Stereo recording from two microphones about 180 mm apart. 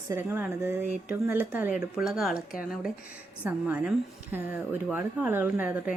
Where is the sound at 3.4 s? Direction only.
10° right (ahead or behind).